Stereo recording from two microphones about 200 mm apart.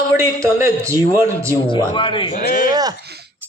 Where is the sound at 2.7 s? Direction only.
20° right (ahead or behind).